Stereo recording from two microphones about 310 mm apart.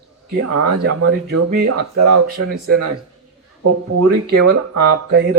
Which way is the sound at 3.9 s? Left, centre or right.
Right.